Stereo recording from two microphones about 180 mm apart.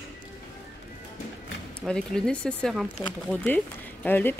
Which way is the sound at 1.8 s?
5° left (ahead or behind).